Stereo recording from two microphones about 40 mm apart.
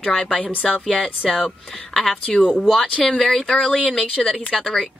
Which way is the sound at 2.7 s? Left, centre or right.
Left.